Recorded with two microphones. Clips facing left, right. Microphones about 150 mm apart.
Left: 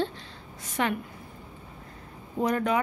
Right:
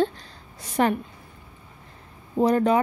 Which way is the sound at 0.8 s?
40° right (ahead or behind).